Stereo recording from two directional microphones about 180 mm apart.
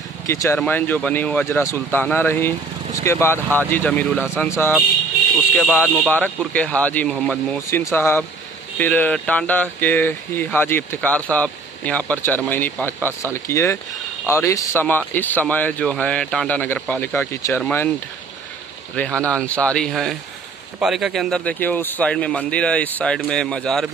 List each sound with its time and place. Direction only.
0.3 s speech: 15° left (ahead or behind)
5.8 s speech: 10° left (ahead or behind)
18.9 s speech: 5° left (ahead or behind)